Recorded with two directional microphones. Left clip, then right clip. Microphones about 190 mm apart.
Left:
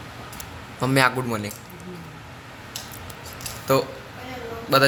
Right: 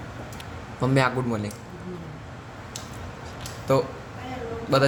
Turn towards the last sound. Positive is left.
turn(degrees=0)  # may be behind; listen again after turning